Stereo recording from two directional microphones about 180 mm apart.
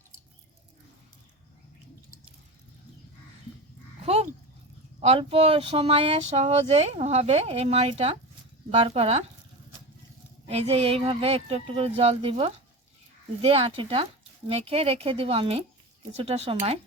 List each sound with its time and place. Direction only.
4.0 s a sound: 35° right (ahead or behind)
4.9 s speech: 35° right (ahead or behind)
10.4 s speech: 35° right (ahead or behind)